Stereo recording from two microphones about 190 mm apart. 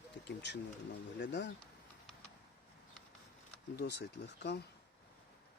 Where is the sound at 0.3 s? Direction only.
60° left (ahead or behind).